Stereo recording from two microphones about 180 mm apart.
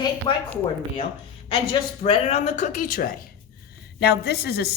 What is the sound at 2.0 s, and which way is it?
Speech, 35° left (ahead or behind).